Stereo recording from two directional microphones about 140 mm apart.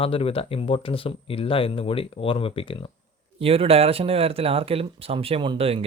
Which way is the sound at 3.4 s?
45° right (ahead or behind).